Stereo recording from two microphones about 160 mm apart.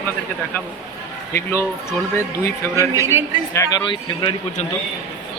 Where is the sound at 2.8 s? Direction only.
20° right (ahead or behind).